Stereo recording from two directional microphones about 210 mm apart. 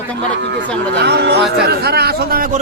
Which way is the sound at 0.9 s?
50° right (ahead or behind).